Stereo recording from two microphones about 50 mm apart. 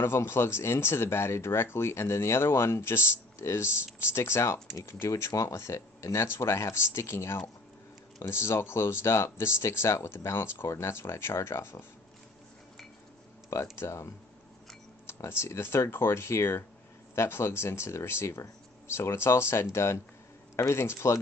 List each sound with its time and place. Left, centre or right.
0.0 s speech: left
5.1 s speech: left
6.4 s speech: left
10.3 s speech: left
13.5 s speech: left
15.0 s speech: left